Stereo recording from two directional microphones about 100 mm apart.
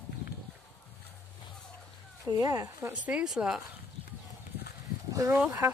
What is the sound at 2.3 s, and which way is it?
Speech, 40° right (ahead or behind).